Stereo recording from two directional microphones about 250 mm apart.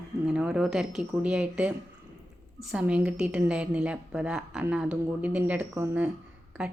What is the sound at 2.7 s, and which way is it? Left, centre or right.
A woman's voice, centre.